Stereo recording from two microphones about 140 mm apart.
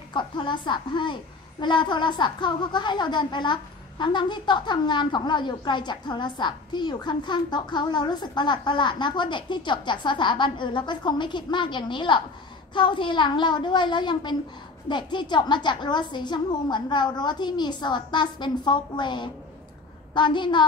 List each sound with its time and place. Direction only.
0.1 s a woman's voice: 35° left (ahead or behind)